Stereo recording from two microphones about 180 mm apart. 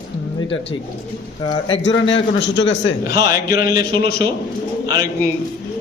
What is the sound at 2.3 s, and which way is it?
A man's voice, 75° left (ahead or behind).